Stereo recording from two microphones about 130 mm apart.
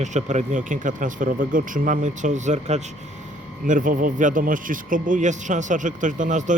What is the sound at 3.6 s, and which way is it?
Speech, 85° right.